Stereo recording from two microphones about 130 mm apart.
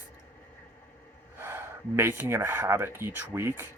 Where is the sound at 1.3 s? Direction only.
20° right (ahead or behind).